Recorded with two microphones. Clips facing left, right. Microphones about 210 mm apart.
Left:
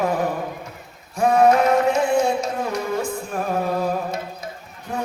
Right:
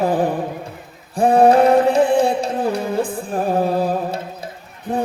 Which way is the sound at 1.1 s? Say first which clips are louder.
Right 4 dB; 30° right (ahead or behind).